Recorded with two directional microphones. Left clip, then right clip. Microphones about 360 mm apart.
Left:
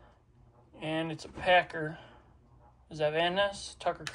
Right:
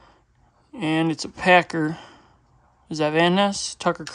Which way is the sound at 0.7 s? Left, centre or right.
Right.